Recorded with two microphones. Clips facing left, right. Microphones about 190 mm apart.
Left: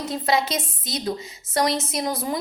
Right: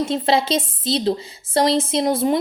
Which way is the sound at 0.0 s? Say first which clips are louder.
Right 4 dB; 25° right (ahead or behind).